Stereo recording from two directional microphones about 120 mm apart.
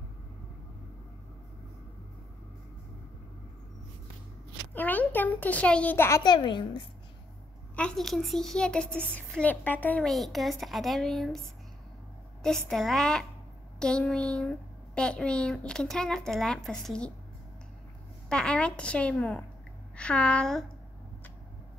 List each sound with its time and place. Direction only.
4.7 s a child's voice: 15° left (ahead or behind)
6.2 s a woman's voice: 40° left (ahead or behind)
7.7 s a woman's voice: 5° left (ahead or behind)
10.0 s speech: centre (ahead or behind)
12.4 s a woman's voice: 5° left (ahead or behind)
18.3 s a woman's voice: 10° left (ahead or behind)